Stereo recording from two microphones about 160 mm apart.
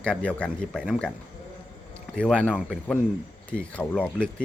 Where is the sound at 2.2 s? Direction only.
5° left (ahead or behind).